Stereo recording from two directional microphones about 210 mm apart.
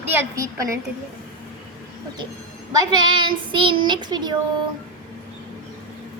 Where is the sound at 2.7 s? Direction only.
20° right (ahead or behind).